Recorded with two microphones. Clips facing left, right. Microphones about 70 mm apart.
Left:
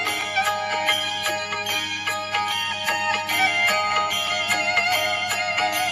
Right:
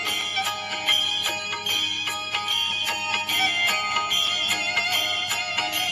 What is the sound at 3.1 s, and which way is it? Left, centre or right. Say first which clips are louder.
Music: left 2 dB; left.